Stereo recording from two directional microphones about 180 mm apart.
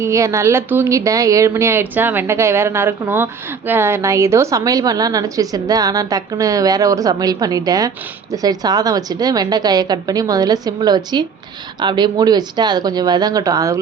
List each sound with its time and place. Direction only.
0.0 s a woman's voice: 15° right (ahead or behind)